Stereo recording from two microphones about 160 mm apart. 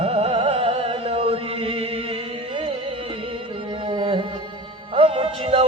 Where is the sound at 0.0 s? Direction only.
40° right (ahead or behind).